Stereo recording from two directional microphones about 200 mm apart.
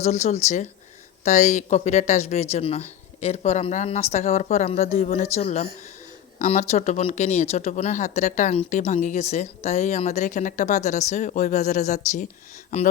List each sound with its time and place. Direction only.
0.0 s speech: 35° left (ahead or behind)